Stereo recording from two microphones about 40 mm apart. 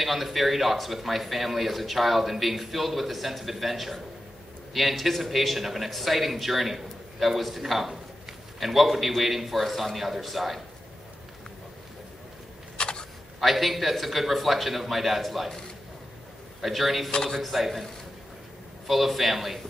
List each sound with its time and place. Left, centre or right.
0.0 s speech: centre
12.7 s a sound: left
13.4 s speech: centre
16.6 s speech: centre
18.9 s speech: centre